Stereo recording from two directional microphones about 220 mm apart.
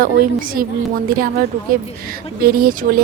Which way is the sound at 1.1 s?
40° right (ahead or behind).